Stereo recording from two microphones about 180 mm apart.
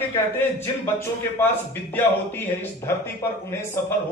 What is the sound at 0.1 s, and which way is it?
A man's voice, 15° left (ahead or behind).